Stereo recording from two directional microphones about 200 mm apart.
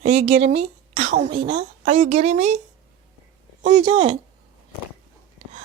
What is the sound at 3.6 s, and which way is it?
Speech, 30° right (ahead or behind).